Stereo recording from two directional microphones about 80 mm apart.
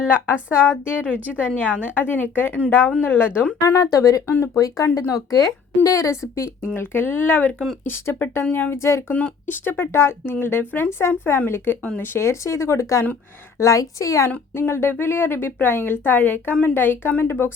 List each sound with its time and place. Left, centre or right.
0.9 s a woman's voice: centre
1.4 s speech: left
3.6 s a woman's voice: left
9.1 s speech: centre
9.6 s a woman's voice: left
14.5 s speech: left